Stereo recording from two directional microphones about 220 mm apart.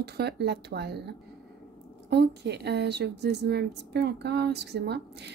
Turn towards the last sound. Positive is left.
turn(degrees=-50)  # may be behind; listen again after turning